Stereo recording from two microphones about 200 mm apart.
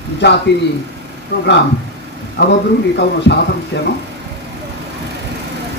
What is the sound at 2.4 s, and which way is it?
Speech, 55° left (ahead or behind).